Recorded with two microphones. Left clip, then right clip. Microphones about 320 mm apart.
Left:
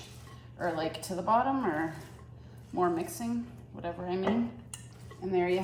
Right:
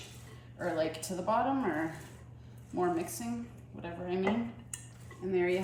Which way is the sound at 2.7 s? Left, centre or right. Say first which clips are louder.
Left 2 dB; centre.